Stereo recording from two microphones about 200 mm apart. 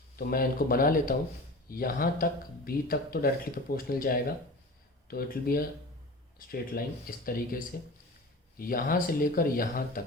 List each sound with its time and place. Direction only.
0.2 s speech: 45° left (ahead or behind)
6.7 s speech: 50° left (ahead or behind)